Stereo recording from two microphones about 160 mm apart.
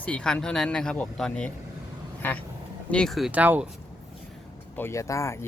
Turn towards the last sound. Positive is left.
turn(degrees=20)  # may be behind; listen again after turning